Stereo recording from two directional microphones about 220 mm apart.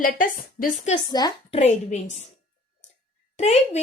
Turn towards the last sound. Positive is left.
turn(degrees=30)  # may be behind; listen again after turning